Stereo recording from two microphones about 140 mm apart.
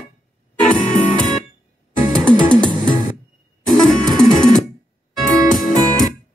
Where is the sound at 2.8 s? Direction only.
65° left (ahead or behind).